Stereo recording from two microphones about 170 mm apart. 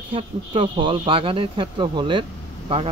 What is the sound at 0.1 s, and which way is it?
Speech, 30° right (ahead or behind).